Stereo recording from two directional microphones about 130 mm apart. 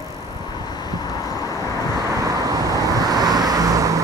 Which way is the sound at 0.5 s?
30° left (ahead or behind).